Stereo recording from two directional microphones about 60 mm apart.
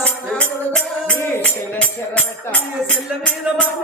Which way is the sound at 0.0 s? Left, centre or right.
Centre.